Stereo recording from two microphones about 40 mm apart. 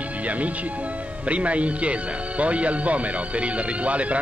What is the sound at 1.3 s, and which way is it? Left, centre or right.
Speech, right.